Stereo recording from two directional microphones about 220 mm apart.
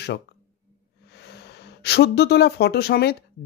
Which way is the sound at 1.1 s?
50° left (ahead or behind).